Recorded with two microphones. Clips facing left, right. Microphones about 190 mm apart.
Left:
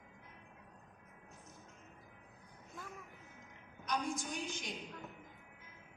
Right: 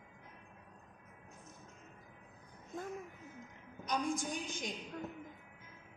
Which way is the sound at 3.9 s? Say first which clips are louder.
Right 2 dB; 50° right (ahead or behind).